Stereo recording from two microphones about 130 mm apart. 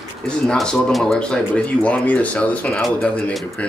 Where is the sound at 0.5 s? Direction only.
5° left (ahead or behind).